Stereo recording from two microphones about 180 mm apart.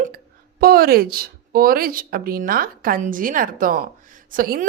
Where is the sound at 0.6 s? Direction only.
55° right (ahead or behind).